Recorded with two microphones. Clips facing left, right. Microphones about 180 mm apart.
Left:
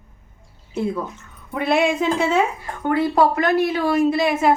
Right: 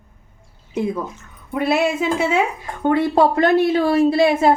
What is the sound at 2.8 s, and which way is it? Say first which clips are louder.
A woman's voice: right 2 dB; 25° right (ahead or behind).